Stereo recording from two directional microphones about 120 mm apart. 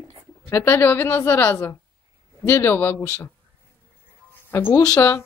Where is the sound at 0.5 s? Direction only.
20° left (ahead or behind).